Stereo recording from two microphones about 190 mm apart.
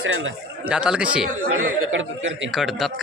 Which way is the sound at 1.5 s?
85° right.